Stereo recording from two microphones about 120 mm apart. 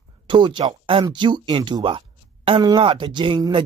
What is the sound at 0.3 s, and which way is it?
Speech, 40° right (ahead or behind).